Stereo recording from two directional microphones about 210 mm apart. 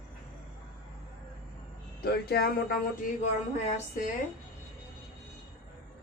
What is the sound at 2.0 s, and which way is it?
A woman's voice, 50° left (ahead or behind).